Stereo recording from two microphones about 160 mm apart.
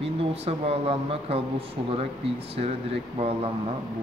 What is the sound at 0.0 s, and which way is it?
Speech, 40° right (ahead or behind).